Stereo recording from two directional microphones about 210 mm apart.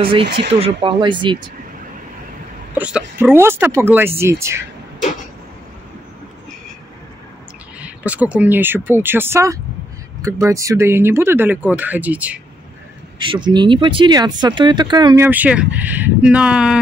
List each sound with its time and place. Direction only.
0.5 s speech: 25° right (ahead or behind)
2.7 s speech: 5° right (ahead or behind)
7.8 s speech: 5° right (ahead or behind)
13.2 s speech: 20° right (ahead or behind)
15.2 s speech: 5° right (ahead or behind)